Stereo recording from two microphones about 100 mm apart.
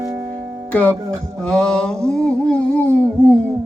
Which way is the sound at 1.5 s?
5° left (ahead or behind).